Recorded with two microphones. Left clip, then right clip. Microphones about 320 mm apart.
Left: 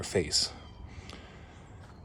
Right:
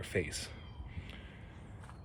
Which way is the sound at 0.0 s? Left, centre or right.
Centre.